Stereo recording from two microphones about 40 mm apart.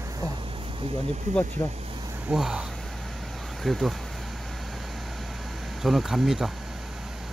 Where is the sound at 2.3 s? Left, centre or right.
Centre.